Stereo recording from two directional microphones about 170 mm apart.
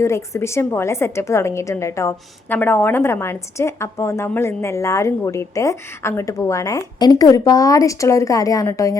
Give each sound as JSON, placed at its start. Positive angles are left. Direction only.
{"t": 0.0, "sound": "a woman's voice", "side_deg": 15}